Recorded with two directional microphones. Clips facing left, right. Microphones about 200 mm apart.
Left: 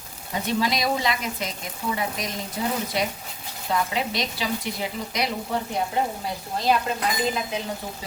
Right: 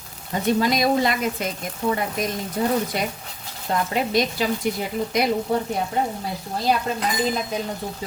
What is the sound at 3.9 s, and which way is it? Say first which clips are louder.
Speech: right 6 dB; 50° right (ahead or behind).